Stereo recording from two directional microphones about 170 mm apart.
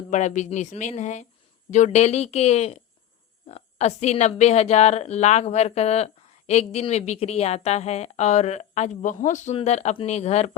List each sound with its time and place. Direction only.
0.1 s a woman's voice: 45° left (ahead or behind)